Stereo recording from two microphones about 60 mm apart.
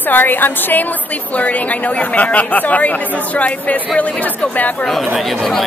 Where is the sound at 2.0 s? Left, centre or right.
Left.